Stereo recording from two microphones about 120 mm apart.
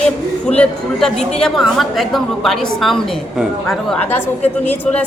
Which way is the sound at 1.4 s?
Centre (ahead or behind).